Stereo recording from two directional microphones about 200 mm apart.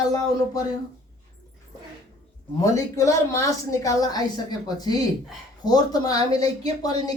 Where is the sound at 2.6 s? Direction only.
15° left (ahead or behind).